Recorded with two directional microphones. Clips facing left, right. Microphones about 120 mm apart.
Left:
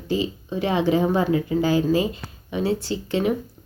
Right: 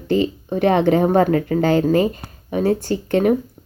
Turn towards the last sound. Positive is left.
turn(degrees=-55)  # may be behind; listen again after turning